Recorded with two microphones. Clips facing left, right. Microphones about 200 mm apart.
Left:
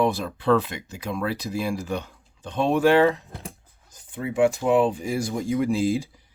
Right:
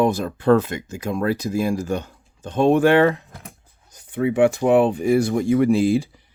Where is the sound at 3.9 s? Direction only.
65° right (ahead or behind).